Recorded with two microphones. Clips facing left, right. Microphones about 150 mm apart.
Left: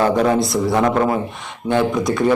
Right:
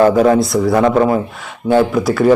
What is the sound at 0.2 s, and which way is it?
Speech, centre (ahead or behind).